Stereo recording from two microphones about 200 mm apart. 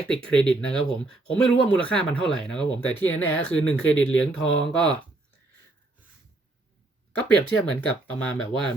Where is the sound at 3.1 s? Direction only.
80° left.